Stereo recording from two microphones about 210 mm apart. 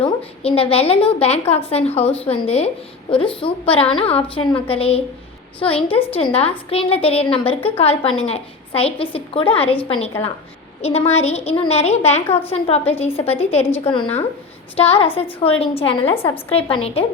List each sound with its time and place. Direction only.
0.0 s a woman's voice: 25° left (ahead or behind)
3.4 s a woman's voice: 25° left (ahead or behind)